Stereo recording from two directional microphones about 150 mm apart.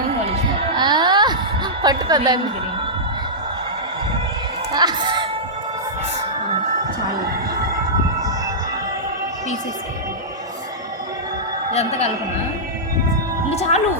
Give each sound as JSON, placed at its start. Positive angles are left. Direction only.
{"t": 0.8, "sound": "a sound", "side_deg": -30}
{"t": 1.8, "sound": "a woman's voice", "side_deg": -25}
{"t": 4.7, "sound": "speech", "side_deg": -30}
{"t": 7.2, "sound": "a sound", "side_deg": -85}
{"t": 11.7, "sound": "a man's voice", "side_deg": 45}
{"t": 13.5, "sound": "speech", "side_deg": 45}